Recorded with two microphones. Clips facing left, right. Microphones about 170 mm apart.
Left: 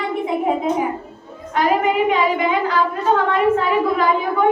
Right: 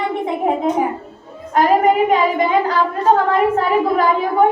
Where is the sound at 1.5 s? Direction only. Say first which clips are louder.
Right 4 dB; 40° right (ahead or behind).